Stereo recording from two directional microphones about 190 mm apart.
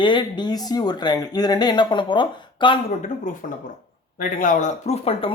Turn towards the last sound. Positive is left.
turn(degrees=30)  # may be behind; listen again after turning